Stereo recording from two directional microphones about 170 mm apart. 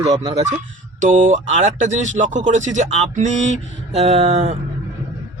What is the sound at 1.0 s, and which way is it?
Speech, 50° right (ahead or behind).